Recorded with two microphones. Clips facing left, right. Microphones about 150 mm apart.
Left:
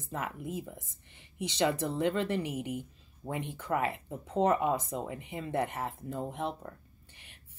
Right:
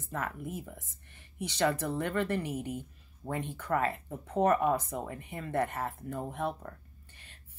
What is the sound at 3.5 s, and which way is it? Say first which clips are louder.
A woman's voice: right 1 dB; 10° left (ahead or behind).